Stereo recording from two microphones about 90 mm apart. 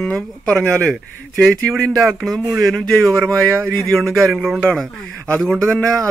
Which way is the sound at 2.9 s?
10° left (ahead or behind).